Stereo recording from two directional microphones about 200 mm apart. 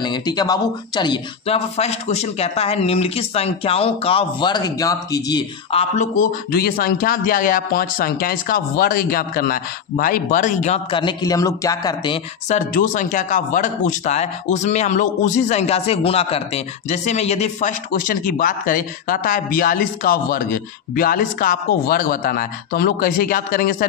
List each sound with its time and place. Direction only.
0.0 s speech: 20° left (ahead or behind)
5.7 s speech: 30° left (ahead or behind)
6.1 s speech: 50° left (ahead or behind); by 12.2 s 20° left (ahead or behind)
12.4 s a man's voice: 40° left (ahead or behind)